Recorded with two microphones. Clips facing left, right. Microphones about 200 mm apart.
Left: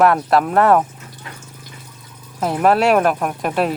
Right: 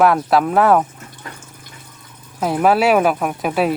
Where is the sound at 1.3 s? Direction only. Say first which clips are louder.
Right 2 dB; 45° right (ahead or behind).